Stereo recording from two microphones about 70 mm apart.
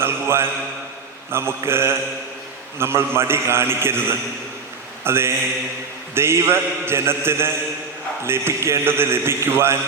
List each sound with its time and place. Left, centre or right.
0.0 s mantra: right
1.3 s a man's voice: right
5.0 s a man's voice: right